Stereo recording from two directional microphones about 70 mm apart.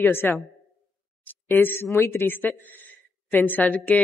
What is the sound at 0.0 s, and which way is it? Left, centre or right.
A woman's voice, left.